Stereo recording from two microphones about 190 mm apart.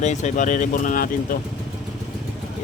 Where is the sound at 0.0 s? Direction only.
40° left (ahead or behind).